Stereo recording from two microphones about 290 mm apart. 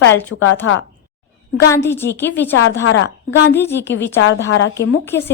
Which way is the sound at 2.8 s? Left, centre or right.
Left.